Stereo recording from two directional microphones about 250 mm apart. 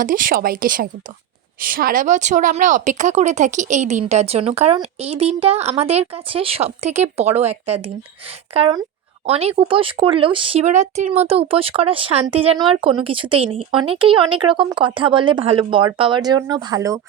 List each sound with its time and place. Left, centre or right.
0.0 s speech: right
8.5 s speech: right